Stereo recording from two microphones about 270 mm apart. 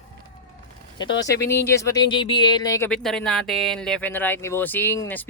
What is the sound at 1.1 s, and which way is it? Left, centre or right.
Speech, left.